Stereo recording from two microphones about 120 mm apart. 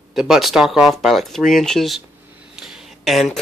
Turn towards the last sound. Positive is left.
turn(degrees=0)  # may be behind; listen again after turning